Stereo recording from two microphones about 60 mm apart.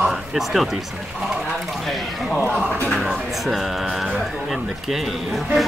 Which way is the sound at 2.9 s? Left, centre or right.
Centre.